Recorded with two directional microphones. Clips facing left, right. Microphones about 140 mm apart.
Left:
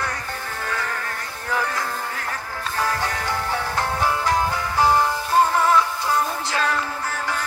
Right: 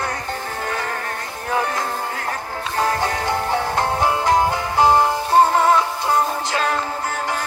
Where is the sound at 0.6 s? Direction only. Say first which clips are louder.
Right 1 dB; 30° right (ahead or behind).